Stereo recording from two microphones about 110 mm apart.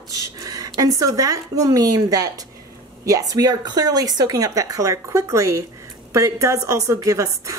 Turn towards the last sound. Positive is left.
turn(degrees=-30)  # may be behind; listen again after turning